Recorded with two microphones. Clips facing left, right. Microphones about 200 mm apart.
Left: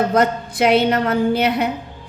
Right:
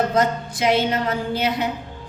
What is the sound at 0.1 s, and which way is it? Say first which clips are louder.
Music: left 3 dB; 60° left (ahead or behind).